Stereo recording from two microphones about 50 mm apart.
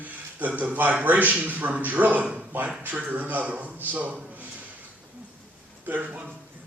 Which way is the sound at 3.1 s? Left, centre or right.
Right.